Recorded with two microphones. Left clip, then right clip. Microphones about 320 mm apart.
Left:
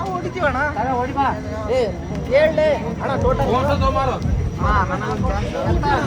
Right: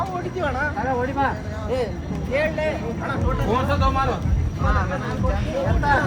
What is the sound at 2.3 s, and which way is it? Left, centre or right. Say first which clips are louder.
Speech: left 8 dB; left.